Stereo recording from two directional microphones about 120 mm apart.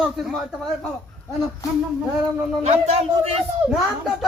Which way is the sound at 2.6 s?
65° right (ahead or behind).